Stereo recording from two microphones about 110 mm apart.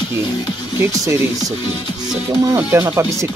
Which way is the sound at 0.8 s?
25° right (ahead or behind).